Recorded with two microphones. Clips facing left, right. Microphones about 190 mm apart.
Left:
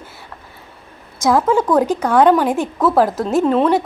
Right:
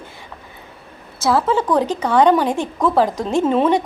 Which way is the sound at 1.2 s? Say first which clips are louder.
Left 2 dB; 15° left (ahead or behind).